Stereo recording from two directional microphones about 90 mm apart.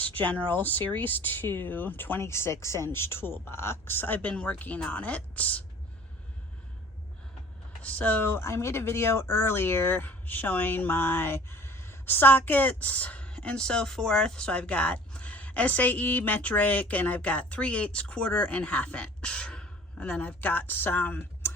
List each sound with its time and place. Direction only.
0.0 s speech: 15° left (ahead or behind)
7.8 s speech: 15° left (ahead or behind)